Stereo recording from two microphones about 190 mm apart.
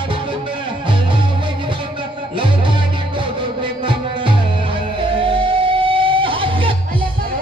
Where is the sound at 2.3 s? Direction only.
25° right (ahead or behind).